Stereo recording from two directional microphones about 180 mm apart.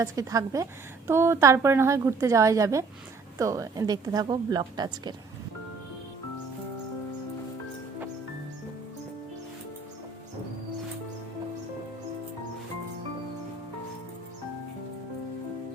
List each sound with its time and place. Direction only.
0.0 s a woman's voice: 20° right (ahead or behind)